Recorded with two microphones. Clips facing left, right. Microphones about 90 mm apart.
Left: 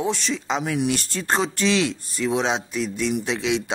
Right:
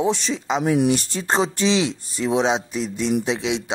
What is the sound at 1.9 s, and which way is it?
Speech, 20° right (ahead or behind).